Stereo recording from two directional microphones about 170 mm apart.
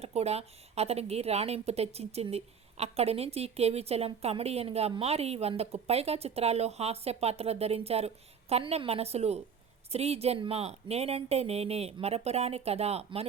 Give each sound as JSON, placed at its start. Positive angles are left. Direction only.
{"t": 0.0, "sound": "a woman's voice", "side_deg": -40}